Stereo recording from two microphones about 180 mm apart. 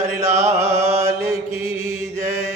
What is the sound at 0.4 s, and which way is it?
Mantra, 15° right (ahead or behind).